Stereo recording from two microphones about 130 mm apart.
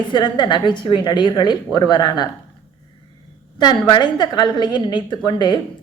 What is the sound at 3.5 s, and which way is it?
A woman's voice, 35° left (ahead or behind).